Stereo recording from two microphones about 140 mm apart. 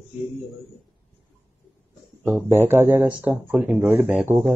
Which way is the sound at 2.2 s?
15° right (ahead or behind).